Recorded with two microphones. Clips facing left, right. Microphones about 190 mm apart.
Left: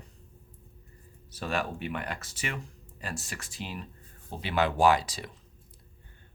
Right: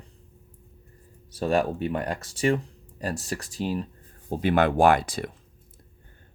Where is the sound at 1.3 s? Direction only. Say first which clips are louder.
Right 8 dB; 35° right (ahead or behind).